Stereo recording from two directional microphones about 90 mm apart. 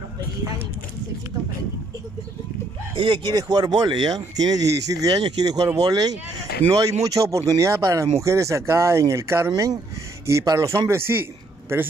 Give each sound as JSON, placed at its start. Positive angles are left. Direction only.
{"t": 3.0, "sound": "speech", "side_deg": -75}
{"t": 3.3, "sound": "speech", "side_deg": -45}
{"t": 6.7, "sound": "speech", "side_deg": -35}
{"t": 9.5, "sound": "a man's voice", "side_deg": -45}